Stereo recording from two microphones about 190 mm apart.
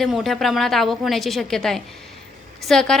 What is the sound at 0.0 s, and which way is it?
A woman's voice, centre (ahead or behind).